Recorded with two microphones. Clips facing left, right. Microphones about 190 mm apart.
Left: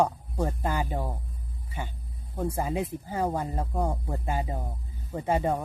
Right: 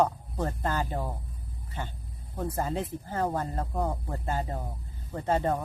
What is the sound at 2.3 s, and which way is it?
Speech, 10° left (ahead or behind).